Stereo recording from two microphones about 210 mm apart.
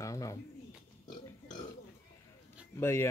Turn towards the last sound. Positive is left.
turn(degrees=10)  # may be behind; listen again after turning